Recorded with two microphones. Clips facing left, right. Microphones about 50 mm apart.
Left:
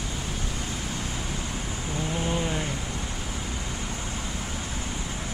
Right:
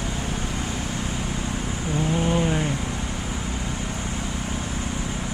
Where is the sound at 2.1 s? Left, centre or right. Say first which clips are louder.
Right 5 dB; centre.